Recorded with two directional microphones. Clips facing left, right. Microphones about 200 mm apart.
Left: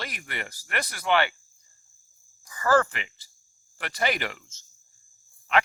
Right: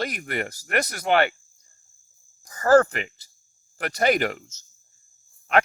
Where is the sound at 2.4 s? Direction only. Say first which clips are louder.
Right 6 dB; 40° right (ahead or behind).